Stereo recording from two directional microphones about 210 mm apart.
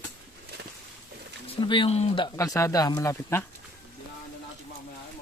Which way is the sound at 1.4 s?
25° left (ahead or behind).